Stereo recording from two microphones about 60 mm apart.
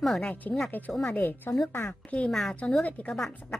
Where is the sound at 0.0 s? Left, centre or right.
Centre.